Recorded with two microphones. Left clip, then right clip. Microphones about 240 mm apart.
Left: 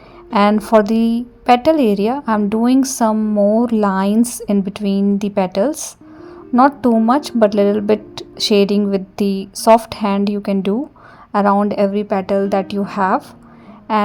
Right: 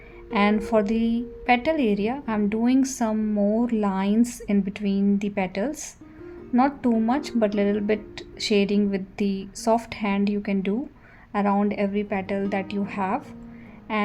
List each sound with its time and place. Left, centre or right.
0.3 s a woman's voice: left